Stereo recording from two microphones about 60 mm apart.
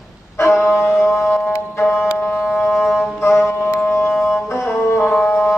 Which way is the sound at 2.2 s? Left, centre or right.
Left.